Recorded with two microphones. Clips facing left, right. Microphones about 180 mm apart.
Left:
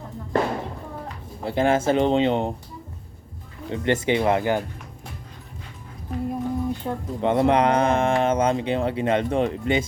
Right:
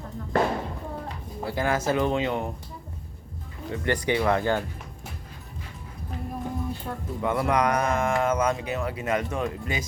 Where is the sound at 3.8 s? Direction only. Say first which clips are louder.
Left 3 dB; 20° left (ahead or behind).